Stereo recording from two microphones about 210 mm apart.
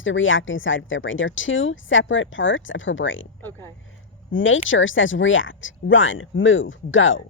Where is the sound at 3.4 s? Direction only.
10° left (ahead or behind).